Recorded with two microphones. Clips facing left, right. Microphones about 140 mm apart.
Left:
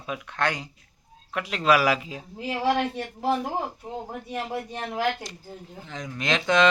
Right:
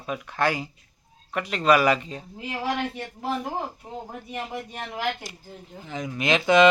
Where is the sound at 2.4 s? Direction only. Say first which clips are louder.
Left 4 dB; 30° left (ahead or behind).